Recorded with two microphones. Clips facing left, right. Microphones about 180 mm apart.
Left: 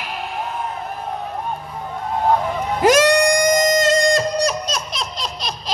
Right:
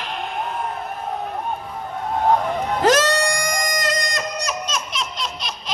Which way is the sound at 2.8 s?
15° left (ahead or behind).